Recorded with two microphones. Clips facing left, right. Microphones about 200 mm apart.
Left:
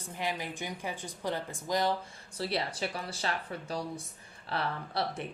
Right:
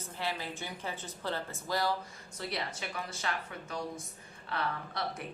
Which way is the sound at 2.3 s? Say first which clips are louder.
Left 5 dB; 30° left (ahead or behind).